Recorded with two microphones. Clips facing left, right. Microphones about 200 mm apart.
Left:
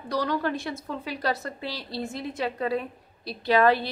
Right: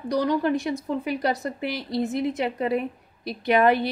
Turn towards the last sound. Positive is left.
turn(degrees=-20)  # may be behind; listen again after turning